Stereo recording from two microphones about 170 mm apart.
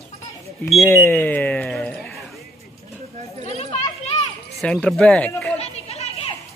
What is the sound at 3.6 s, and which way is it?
Children playing, 35° left (ahead or behind).